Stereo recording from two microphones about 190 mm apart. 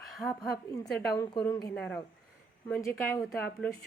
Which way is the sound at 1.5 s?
20° left (ahead or behind).